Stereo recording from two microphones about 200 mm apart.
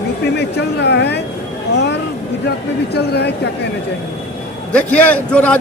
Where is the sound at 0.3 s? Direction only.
55° left (ahead or behind).